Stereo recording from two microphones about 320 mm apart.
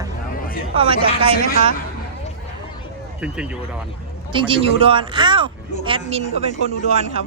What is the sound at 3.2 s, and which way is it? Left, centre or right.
Speech, centre.